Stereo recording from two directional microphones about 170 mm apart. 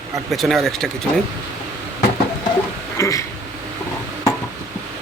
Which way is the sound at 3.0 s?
20° left (ahead or behind).